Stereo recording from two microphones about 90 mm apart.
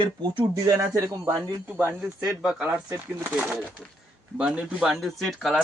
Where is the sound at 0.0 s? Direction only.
65° right (ahead or behind).